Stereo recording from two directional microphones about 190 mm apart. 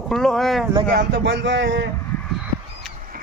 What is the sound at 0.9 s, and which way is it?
Speech, 60° right (ahead or behind).